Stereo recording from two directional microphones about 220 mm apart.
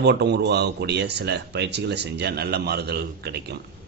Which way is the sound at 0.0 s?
50° right (ahead or behind).